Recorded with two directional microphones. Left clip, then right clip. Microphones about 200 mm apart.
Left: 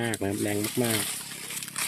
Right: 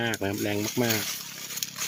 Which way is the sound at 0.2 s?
Centre (ahead or behind).